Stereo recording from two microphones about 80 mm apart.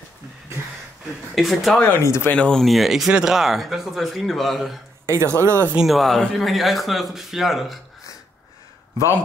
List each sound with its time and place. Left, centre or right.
1.3 s speech: centre
2.0 s speech: left
2.3 s speech: centre
2.6 s speech: centre
5.0 s speech: right
5.8 s speech: centre